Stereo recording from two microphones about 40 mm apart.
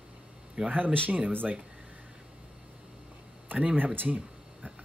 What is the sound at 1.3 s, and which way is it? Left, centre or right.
Speech, right.